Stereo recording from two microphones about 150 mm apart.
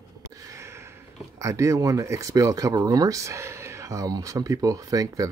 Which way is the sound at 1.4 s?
20° right (ahead or behind).